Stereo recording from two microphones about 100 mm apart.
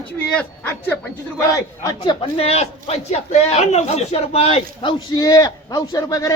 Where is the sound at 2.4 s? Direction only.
90° left.